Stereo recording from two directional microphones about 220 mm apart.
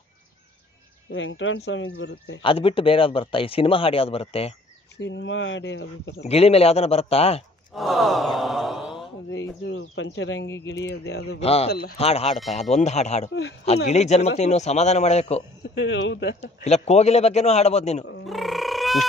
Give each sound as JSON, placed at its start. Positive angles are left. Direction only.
{"t": 1.1, "sound": "speech", "side_deg": 60}
{"t": 2.4, "sound": "speech", "side_deg": 25}
{"t": 4.9, "sound": "speech", "side_deg": 50}
{"t": 6.2, "sound": "speech", "side_deg": 25}
{"t": 7.7, "sound": "gasp", "side_deg": 0}
{"t": 9.4, "sound": "speech", "side_deg": 60}
{"t": 11.3, "sound": "speech", "side_deg": 30}
{"t": 13.3, "sound": "speech", "side_deg": 55}
{"t": 13.8, "sound": "a man's voice", "side_deg": 30}
{"t": 15.7, "sound": "speech", "side_deg": 55}
{"t": 16.3, "sound": "speech", "side_deg": 30}
{"t": 18.2, "sound": "a sound", "side_deg": 0}